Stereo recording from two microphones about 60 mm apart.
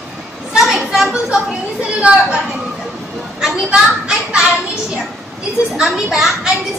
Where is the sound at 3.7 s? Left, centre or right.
Centre.